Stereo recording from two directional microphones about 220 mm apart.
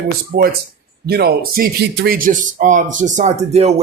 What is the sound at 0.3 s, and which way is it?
Speech, 45° right (ahead or behind).